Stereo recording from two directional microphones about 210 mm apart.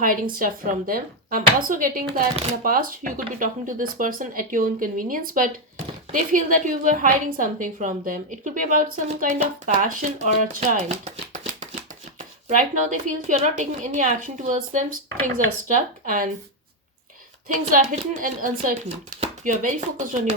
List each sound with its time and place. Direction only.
0.0 s a woman's voice: 40° right (ahead or behind)
17.5 s a woman's voice: 40° right (ahead or behind)